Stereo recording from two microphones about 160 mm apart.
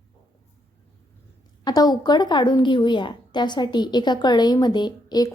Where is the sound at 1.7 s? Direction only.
25° left (ahead or behind).